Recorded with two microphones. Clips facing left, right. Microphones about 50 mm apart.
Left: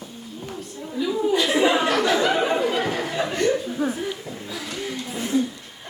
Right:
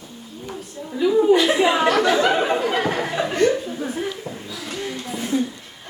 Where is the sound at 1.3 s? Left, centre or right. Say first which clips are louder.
Right 5 dB; right.